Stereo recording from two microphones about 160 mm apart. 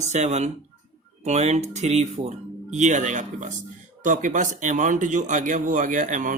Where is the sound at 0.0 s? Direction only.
45° right (ahead or behind).